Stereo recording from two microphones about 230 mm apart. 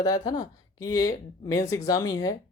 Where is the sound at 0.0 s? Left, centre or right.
Centre.